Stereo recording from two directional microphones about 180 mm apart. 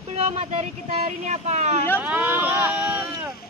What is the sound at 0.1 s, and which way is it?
Speech, 35° right (ahead or behind).